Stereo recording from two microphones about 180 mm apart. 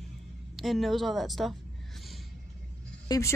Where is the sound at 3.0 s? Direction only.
20° left (ahead or behind).